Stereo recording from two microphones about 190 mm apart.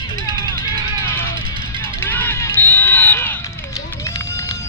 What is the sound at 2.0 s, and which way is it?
Run, 10° left (ahead or behind).